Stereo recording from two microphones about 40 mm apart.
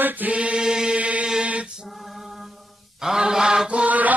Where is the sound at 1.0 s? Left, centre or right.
Right.